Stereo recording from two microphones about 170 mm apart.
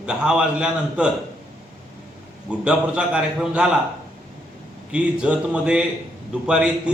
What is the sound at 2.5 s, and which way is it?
A man's voice, 5° right (ahead or behind).